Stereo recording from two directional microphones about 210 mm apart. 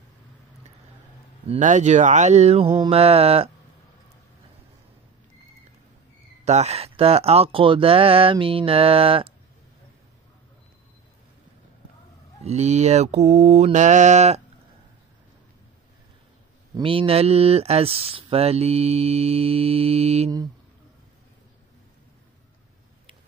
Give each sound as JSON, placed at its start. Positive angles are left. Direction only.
{"t": 1.5, "sound": "speech", "side_deg": -35}
{"t": 6.4, "sound": "speech", "side_deg": -30}
{"t": 12.4, "sound": "mantra", "side_deg": -30}
{"t": 16.7, "sound": "speech", "side_deg": -25}